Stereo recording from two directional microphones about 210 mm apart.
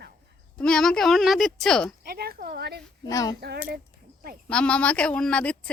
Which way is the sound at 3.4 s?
50° right (ahead or behind).